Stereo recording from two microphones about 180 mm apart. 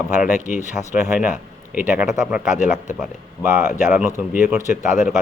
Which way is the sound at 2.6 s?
40° left (ahead or behind).